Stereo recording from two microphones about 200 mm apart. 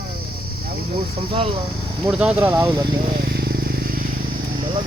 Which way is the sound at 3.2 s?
55° right (ahead or behind).